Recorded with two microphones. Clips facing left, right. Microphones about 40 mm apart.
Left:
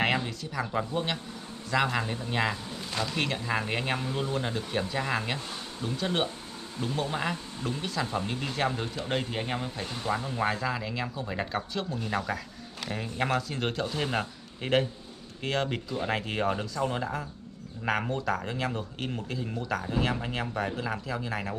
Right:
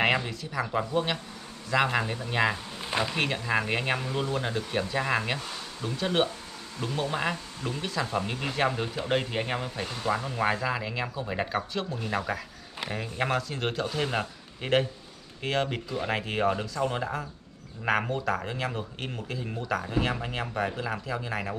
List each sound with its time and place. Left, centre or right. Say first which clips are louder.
0.0 s speech: right 2 dB; centre
2.8 s a sound: right 5 dB; right
3.2 s speech: even; centre